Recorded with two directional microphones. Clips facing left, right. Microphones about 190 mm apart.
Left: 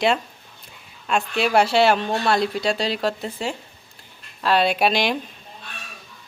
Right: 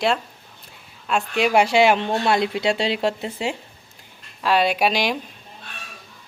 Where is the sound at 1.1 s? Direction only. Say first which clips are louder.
Right 1 dB; 15° right (ahead or behind).